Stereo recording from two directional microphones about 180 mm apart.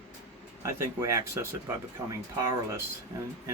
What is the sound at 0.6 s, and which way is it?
Speech, 15° right (ahead or behind).